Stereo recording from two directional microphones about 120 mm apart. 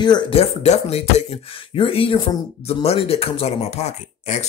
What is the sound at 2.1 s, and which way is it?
Speech, 35° left (ahead or behind).